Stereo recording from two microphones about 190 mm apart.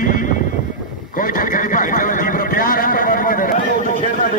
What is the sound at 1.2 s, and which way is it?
A man's voice, 45° left (ahead or behind).